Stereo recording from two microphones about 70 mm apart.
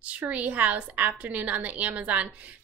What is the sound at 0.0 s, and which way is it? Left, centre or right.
A woman's voice, centre.